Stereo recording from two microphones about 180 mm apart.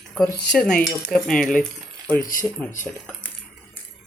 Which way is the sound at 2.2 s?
50° left (ahead or behind).